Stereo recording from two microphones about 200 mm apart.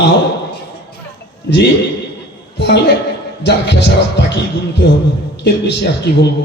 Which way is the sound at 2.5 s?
60° left (ahead or behind).